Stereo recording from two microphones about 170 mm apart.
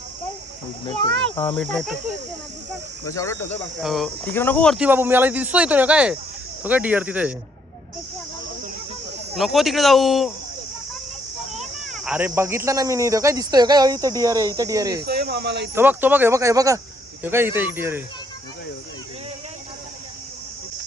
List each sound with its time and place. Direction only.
1.0 s speech: 10° left (ahead or behind)
3.1 s speech: 15° left (ahead or behind)
3.8 s speech: centre (ahead or behind)
4.8 s speech: 10° right (ahead or behind)
9.3 s speech: centre (ahead or behind)
11.5 s speech: centre (ahead or behind); by 15.0 s 20° right (ahead or behind)
15.0 s speech: 70° right (ahead or behind)
15.7 s speech: 10° right (ahead or behind)